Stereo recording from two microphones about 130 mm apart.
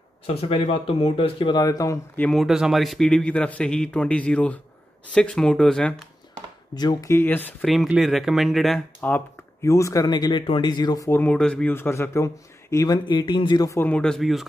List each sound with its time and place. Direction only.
0.3 s speech: 50° left (ahead or behind); by 2.0 s 30° left (ahead or behind)
2.1 s a man's voice: 10° left (ahead or behind)
2.4 s a man's voice: 5° right (ahead or behind)
6.7 s speech: 30° left (ahead or behind); by 7.5 s 15° left (ahead or behind)
7.6 s speech: centre (ahead or behind)
9.0 s speech: 15° left (ahead or behind)
11.1 s a man's voice: 15° left (ahead or behind)
11.7 s speech: 20° left (ahead or behind); by 13.7 s 35° left (ahead or behind)
13.7 s a man's voice: 15° left (ahead or behind)